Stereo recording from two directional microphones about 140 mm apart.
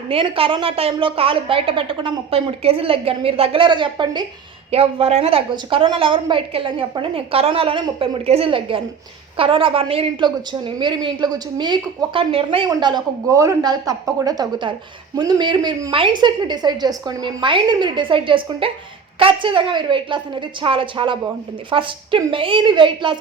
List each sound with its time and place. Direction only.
0.1 s a woman's voice: 40° right (ahead or behind)
4.7 s a woman's voice: 45° right (ahead or behind)